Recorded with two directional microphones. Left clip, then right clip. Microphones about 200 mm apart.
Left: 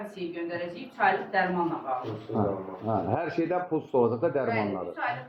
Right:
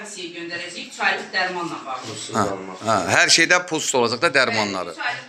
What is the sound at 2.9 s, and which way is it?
A man's voice, 40° right (ahead or behind).